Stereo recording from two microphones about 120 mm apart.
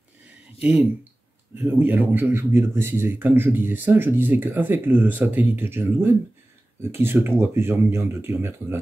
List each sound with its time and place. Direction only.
0.6 s a man's voice: 10° right (ahead or behind)